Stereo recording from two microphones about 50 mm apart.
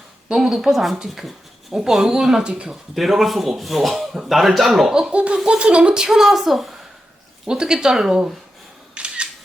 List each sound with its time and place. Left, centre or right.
0.3 s a woman's voice: centre
2.9 s speech: centre
5.1 s laughter: right
5.5 s a woman's voice: right
9.0 s single-lens reflex camera: right